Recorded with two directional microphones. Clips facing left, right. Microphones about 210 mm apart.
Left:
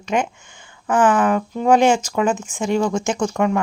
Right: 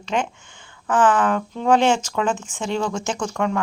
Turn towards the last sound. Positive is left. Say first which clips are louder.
# left 4 dB
turn(degrees=10)  # may be behind; listen again after turning